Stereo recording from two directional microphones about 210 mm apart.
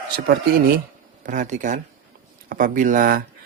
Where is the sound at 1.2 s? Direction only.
35° right (ahead or behind).